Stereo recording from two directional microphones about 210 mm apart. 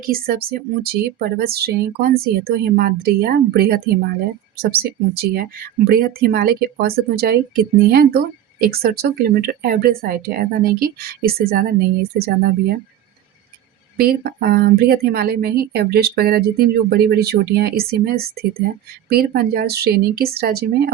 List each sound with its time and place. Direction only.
0.0 s a woman's voice: 45° right (ahead or behind)
14.0 s a woman's voice: 45° right (ahead or behind)